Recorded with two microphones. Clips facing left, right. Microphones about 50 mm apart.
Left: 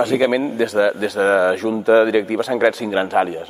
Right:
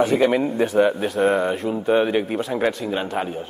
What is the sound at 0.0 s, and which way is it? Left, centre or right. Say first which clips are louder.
Speech: left 1 dB; left.